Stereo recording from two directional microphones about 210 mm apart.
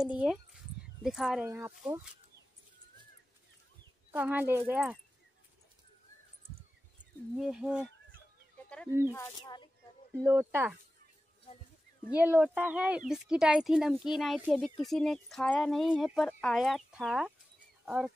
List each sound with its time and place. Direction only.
0.0 s speech: 5° right (ahead or behind)
4.1 s speech: 10° right (ahead or behind)
7.3 s speech: 5° right (ahead or behind)
9.1 s speech: 20° left (ahead or behind)
10.2 s speech: 10° right (ahead or behind)
12.2 s speech: 10° right (ahead or behind)